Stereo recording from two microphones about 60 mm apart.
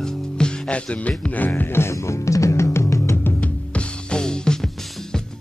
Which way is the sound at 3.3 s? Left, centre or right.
Left.